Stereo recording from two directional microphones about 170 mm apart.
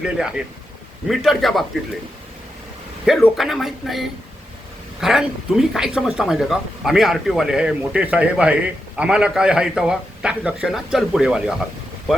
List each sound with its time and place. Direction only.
0.0 s speech: 5° right (ahead or behind)
3.1 s speech: centre (ahead or behind)